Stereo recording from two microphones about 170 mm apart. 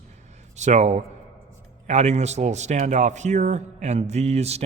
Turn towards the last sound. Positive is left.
turn(degrees=-40)  # may be behind; listen again after turning